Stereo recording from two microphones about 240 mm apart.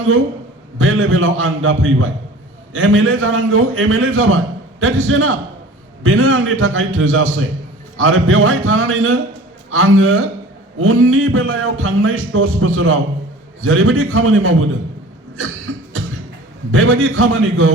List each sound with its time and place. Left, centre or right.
0.8 s a man's voice: right
16.7 s speech: right